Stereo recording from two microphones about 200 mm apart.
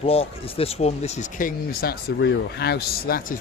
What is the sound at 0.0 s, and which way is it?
Speech, 30° left (ahead or behind).